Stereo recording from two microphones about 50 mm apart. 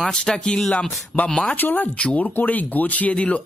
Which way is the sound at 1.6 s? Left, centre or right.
Left.